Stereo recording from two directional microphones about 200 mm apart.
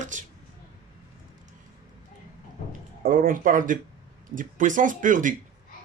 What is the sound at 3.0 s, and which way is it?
Speech, 40° right (ahead or behind).